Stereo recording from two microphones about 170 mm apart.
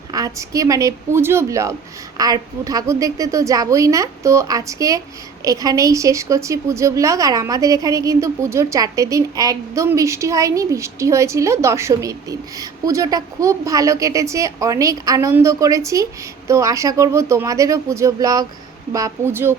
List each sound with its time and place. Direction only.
0.1 s a woman's voice: 20° right (ahead or behind)